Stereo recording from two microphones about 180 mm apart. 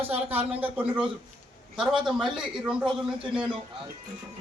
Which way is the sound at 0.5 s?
10° right (ahead or behind).